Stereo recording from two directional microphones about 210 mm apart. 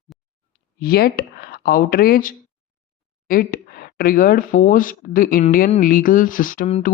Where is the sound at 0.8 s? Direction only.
45° left (ahead or behind).